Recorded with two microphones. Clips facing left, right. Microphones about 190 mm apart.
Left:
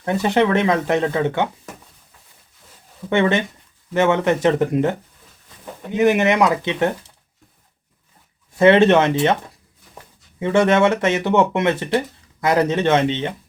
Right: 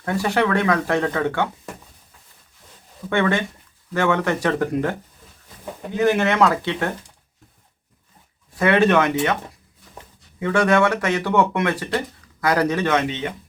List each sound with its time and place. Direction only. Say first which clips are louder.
0.0 s speech: left 3 dB; 20° left (ahead or behind)
3.1 s speech: left 3 dB; 20° left (ahead or behind)
8.5 s speech: left 4 dB; 25° left (ahead or behind)
10.4 s speech: left 2 dB; 25° left (ahead or behind)